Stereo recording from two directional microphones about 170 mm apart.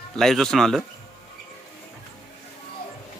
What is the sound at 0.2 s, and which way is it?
Speech, centre (ahead or behind).